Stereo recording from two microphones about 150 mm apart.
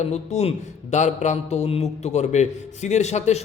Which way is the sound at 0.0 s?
50° left (ahead or behind).